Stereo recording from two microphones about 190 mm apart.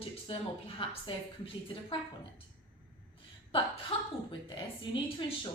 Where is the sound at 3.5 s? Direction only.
30° left (ahead or behind).